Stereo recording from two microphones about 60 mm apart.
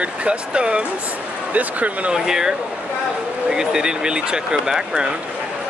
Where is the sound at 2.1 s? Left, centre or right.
Centre.